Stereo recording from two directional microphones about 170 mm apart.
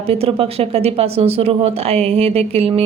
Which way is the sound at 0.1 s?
35° right (ahead or behind).